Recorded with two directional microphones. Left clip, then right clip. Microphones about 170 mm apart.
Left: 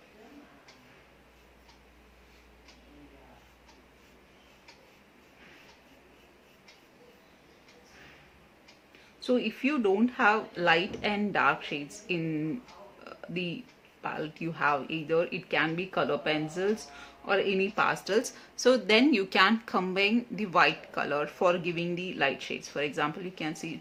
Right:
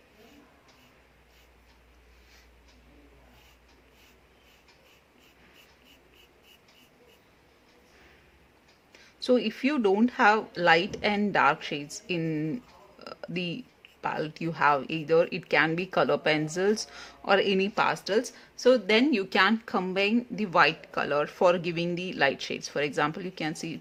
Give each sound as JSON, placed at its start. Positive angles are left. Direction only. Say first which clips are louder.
{"t": 9.2, "sound": "speech", "louder": "right 3 dB", "side_deg": -25}
{"t": 13.1, "sound": "a sound", "louder": "right 2 dB", "side_deg": -25}
{"t": 14.0, "sound": "speech", "louder": "right 4 dB", "side_deg": -25}